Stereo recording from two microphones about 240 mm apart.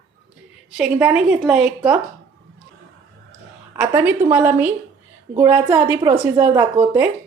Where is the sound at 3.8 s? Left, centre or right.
Centre.